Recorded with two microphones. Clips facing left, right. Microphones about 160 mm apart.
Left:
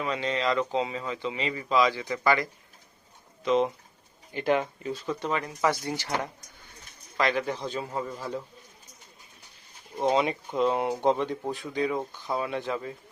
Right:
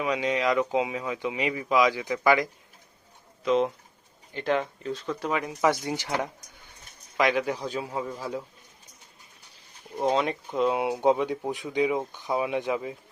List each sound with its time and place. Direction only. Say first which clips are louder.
0.0 s speech: right 2 dB; 10° right (ahead or behind)
3.4 s speech: right 1 dB; centre (ahead or behind)
5.5 s speech: right 4 dB; 15° right (ahead or behind)
10.0 s speech: even; centre (ahead or behind)